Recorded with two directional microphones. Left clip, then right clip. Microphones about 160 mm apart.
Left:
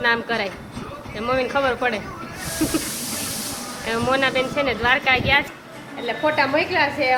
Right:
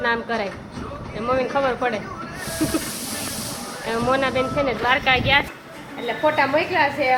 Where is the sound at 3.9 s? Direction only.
30° left (ahead or behind).